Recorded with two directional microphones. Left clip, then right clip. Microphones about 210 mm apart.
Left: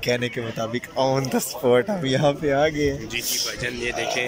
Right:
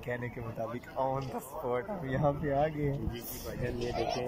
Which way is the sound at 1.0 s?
20° left (ahead or behind).